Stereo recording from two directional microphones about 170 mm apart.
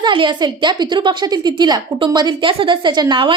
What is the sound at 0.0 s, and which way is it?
A woman's voice, 30° right (ahead or behind).